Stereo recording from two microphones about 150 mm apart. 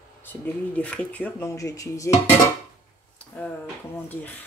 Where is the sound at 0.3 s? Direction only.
10° left (ahead or behind).